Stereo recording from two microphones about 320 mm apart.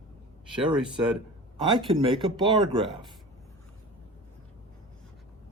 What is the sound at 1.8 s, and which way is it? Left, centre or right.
Speech, centre.